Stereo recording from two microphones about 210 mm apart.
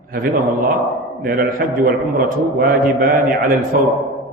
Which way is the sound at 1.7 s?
45° right (ahead or behind).